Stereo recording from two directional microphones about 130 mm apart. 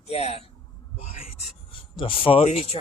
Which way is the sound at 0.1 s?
50° left (ahead or behind).